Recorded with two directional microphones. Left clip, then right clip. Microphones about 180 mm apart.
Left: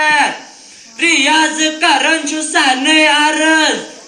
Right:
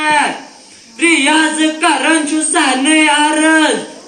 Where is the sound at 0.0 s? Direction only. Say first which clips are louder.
Left 1 dB; 40° left (ahead or behind).